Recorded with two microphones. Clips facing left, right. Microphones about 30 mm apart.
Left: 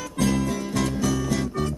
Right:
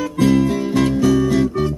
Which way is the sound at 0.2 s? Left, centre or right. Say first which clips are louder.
Right 8 dB; right.